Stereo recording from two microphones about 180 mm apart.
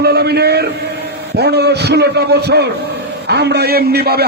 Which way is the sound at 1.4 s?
65° right (ahead or behind).